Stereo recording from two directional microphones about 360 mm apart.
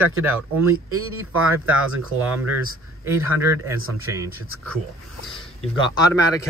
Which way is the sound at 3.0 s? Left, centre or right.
Centre.